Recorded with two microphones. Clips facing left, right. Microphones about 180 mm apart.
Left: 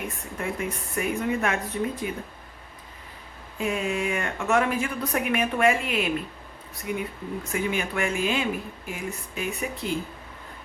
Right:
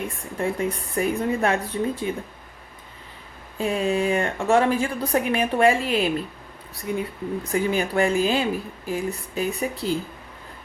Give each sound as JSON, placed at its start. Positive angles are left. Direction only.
{"t": 0.3, "sound": "speech", "side_deg": -30}
{"t": 3.6, "sound": "speech", "side_deg": -35}